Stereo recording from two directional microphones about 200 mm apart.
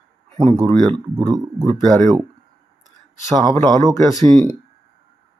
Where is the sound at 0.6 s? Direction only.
20° right (ahead or behind).